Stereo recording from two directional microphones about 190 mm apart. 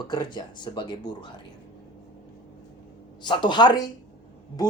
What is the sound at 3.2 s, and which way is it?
Speech, 25° left (ahead or behind).